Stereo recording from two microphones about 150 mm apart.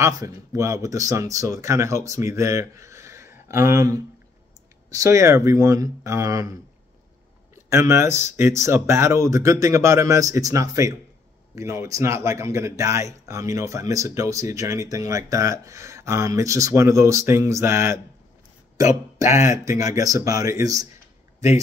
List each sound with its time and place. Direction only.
0.0 s speech: 25° right (ahead or behind)
19.3 s speech: 20° right (ahead or behind)